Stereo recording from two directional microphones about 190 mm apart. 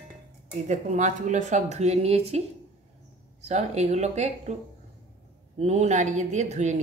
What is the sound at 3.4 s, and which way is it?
Speech, 35° right (ahead or behind).